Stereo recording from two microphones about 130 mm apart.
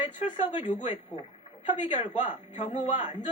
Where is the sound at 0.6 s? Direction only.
70° left (ahead or behind).